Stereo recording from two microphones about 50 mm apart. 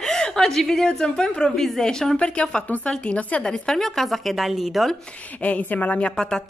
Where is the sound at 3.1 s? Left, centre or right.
Left.